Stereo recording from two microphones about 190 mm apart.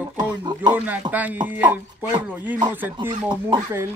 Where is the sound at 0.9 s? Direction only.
10° right (ahead or behind).